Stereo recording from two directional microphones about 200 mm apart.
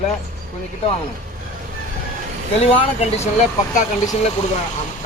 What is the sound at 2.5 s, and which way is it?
Speech, 30° left (ahead or behind).